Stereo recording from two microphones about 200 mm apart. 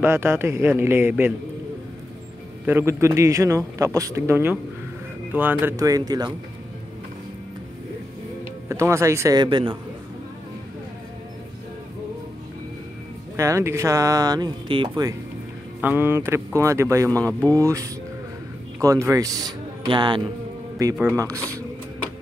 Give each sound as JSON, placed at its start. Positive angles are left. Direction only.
{"t": 0.0, "sound": "a man's voice", "side_deg": -10}
{"t": 2.6, "sound": "a man's voice", "side_deg": -10}
{"t": 8.6, "sound": "a man's voice", "side_deg": -15}
{"t": 13.4, "sound": "a man's voice", "side_deg": -15}
{"t": 15.8, "sound": "a man's voice", "side_deg": -10}